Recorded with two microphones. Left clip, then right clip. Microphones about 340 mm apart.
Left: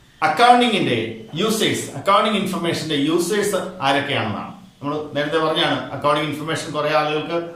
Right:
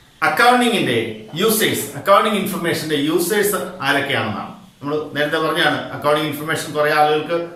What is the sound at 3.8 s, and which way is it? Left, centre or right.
A man's voice, centre.